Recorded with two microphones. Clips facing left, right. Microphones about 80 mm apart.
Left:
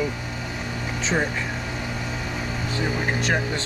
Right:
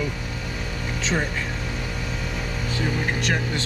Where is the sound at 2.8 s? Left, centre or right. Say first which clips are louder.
Even; centre.